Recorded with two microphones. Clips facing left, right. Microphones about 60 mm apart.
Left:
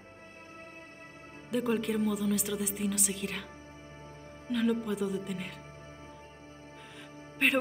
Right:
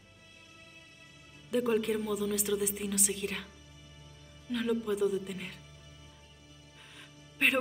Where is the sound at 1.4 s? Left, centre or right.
Centre.